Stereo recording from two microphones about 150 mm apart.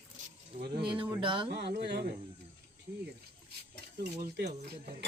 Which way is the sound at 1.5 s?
90° right.